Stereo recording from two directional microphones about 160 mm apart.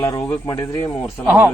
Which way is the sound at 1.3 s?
10° right (ahead or behind).